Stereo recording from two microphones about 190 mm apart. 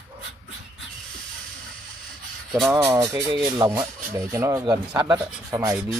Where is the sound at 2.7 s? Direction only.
15° right (ahead or behind).